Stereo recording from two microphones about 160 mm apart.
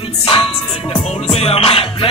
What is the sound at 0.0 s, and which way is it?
Music, 35° left (ahead or behind).